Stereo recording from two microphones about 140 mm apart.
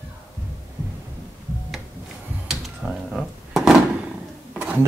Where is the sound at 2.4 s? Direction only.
5° right (ahead or behind).